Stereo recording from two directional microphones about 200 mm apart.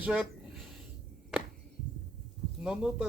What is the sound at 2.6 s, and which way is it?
Speech, 5° right (ahead or behind).